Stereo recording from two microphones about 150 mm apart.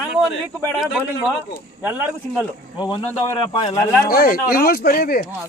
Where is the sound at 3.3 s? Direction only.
35° left (ahead or behind).